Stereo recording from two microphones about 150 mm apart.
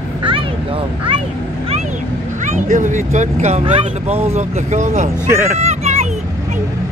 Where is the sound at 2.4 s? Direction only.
55° right (ahead or behind).